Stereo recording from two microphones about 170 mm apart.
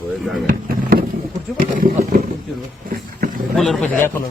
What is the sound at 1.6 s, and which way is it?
Speech, 55° right (ahead or behind).